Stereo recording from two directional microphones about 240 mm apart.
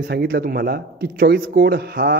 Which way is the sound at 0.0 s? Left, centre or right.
Right.